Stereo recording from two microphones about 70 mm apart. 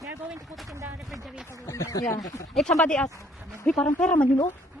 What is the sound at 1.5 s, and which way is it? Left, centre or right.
Speech, left.